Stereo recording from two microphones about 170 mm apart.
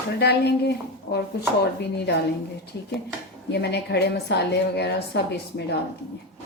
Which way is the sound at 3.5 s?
75° left (ahead or behind).